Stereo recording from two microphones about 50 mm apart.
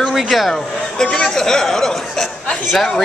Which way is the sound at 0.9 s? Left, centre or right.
Centre.